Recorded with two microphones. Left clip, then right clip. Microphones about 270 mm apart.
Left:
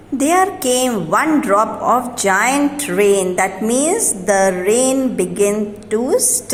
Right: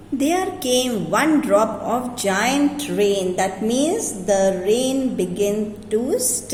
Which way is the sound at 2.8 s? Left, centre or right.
Left.